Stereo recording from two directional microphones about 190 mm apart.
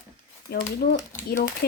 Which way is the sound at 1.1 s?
45° left (ahead or behind).